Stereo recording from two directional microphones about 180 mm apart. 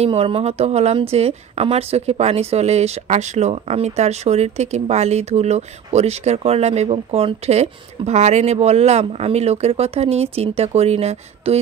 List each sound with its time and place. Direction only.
0.0 s speech: 35° right (ahead or behind)